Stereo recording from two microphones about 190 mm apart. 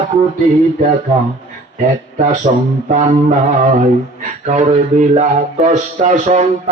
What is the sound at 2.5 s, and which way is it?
Speech, 40° right (ahead or behind).